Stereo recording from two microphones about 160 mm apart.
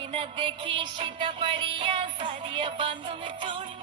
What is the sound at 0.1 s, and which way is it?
Music, 35° right (ahead or behind).